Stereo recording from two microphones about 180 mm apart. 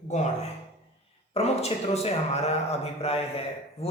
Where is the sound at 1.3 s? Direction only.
35° left (ahead or behind).